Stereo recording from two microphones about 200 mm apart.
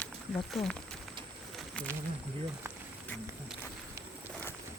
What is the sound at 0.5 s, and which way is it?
Speech, centre (ahead or behind).